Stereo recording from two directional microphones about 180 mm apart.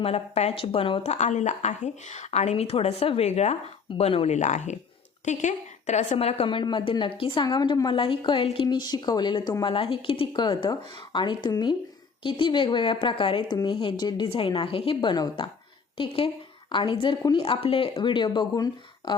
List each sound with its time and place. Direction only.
0.0 s a woman's voice: 35° left (ahead or behind)